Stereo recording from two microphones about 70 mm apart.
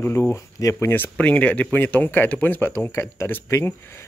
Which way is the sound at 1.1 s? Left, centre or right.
Centre.